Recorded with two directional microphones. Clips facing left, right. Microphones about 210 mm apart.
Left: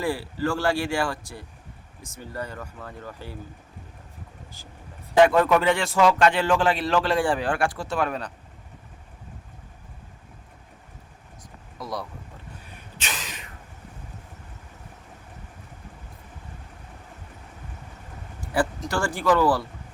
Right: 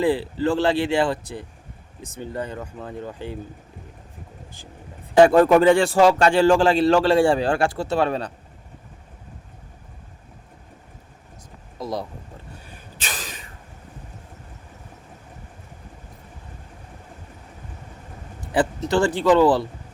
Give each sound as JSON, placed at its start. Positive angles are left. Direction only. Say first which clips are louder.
{"t": 0.0, "sound": "a man's voice", "louder": "right 6 dB", "side_deg": -20}
{"t": 5.1, "sound": "a man's voice", "louder": "right 5 dB", "side_deg": -35}
{"t": 11.8, "sound": "a man's voice", "louder": "right 5 dB", "side_deg": -25}
{"t": 12.6, "sound": "a sound", "louder": "even", "side_deg": -35}
{"t": 18.5, "sound": "a man's voice", "louder": "right 5 dB", "side_deg": -20}